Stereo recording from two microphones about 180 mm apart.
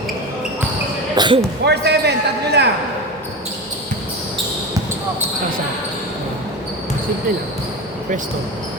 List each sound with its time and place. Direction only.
1.1 s speech: 25° right (ahead or behind)
1.6 s a man's voice: 65° right (ahead or behind)